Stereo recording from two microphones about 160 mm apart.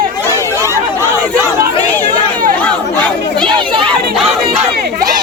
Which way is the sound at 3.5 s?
30° right (ahead or behind).